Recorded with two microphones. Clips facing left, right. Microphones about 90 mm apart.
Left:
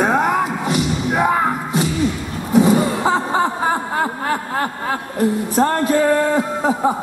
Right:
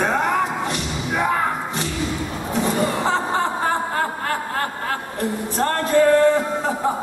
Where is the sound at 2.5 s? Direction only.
5° left (ahead or behind).